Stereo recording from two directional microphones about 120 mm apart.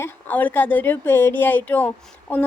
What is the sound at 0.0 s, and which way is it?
Speech, 15° left (ahead or behind).